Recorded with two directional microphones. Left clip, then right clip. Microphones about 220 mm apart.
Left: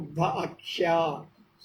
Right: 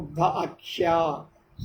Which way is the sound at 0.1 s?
15° right (ahead or behind).